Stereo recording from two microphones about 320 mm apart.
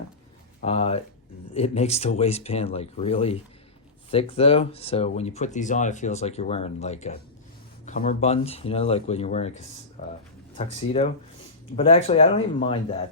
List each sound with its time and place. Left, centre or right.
0.6 s speech: centre
10.8 s speech: centre